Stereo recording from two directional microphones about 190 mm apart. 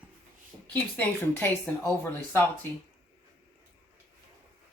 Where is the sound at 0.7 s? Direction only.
10° left (ahead or behind).